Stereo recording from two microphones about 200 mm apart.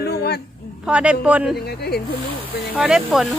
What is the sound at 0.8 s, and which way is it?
Speech, 5° right (ahead or behind).